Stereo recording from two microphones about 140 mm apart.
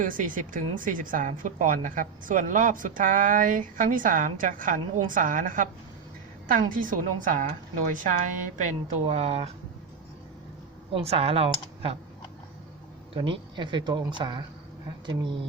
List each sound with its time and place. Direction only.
0.0 s a woman's voice: 75° right (ahead or behind)
7.9 s a woman's voice: 60° right (ahead or behind); by 9.5 s 45° right (ahead or behind)
10.9 s speech: 45° right (ahead or behind)
13.1 s speech: 40° right (ahead or behind)